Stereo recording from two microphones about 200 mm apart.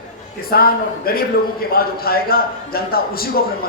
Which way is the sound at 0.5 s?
50° left (ahead or behind).